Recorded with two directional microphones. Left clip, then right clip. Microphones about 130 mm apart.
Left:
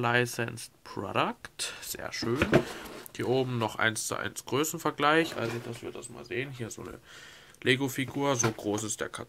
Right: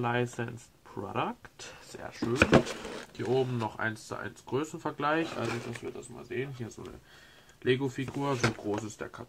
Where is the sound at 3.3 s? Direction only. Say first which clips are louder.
Left 1 dB; 20° left (ahead or behind).